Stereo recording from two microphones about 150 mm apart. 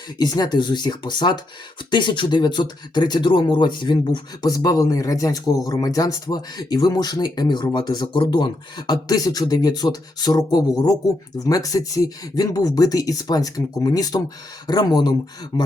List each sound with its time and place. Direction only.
0.2 s speech: 25° left (ahead or behind)